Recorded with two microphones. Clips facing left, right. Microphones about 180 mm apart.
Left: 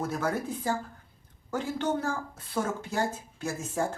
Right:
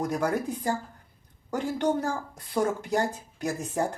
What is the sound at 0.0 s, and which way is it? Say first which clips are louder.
Speech: right 3 dB; 15° right (ahead or behind).